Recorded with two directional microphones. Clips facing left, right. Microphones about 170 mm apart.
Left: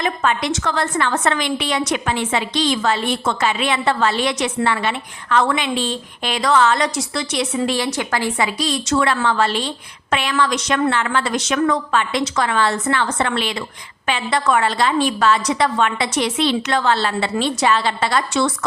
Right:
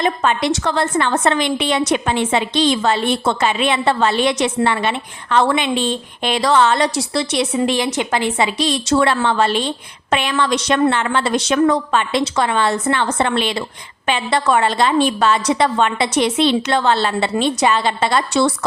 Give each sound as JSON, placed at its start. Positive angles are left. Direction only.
{"t": 0.0, "sound": "a woman's voice", "side_deg": -25}